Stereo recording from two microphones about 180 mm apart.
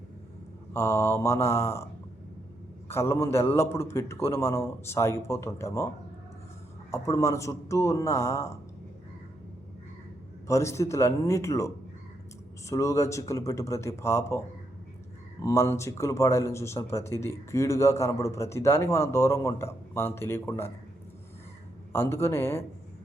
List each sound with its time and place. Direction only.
0.7 s a man's voice: 15° left (ahead or behind)
2.9 s a man's voice: 15° left (ahead or behind)
6.9 s a man's voice: 15° left (ahead or behind)
10.4 s a man's voice: 15° left (ahead or behind)
21.9 s a man's voice: 15° left (ahead or behind)